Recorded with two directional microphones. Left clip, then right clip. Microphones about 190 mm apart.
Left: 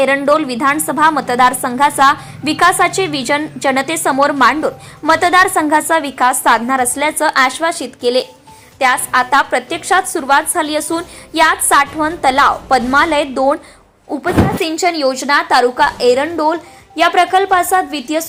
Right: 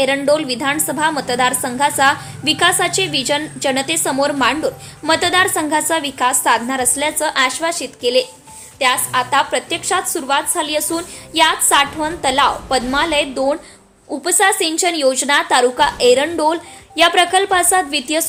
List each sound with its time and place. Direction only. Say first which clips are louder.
0.0 s a woman's voice: left 3 dB; 10° left (ahead or behind)